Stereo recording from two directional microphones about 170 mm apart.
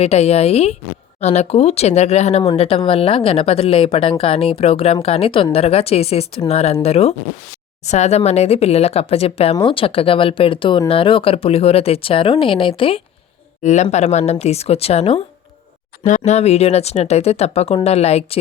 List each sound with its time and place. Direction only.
0.0 s speech: 35° left (ahead or behind)
13.6 s a man's voice: 45° left (ahead or behind)